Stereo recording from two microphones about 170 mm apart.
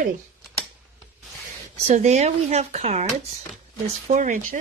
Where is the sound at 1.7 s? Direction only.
40° right (ahead or behind).